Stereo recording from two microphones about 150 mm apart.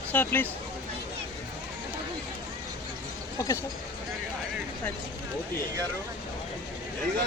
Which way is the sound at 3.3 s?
20° left (ahead or behind).